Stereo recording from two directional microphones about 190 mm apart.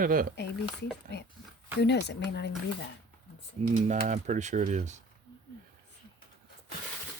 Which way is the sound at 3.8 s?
40° right (ahead or behind).